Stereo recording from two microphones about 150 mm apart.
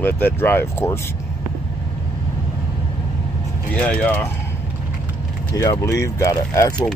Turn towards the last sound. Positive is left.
turn(degrees=20)  # may be behind; listen again after turning